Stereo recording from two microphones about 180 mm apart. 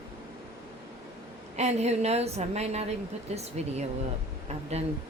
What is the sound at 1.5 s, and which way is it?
A woman's voice, 35° right (ahead or behind).